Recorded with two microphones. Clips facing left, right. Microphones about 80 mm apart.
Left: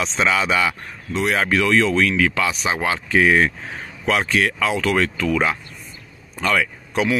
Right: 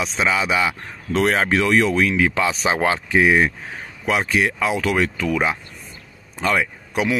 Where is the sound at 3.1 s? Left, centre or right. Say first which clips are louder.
Left 2 dB; centre.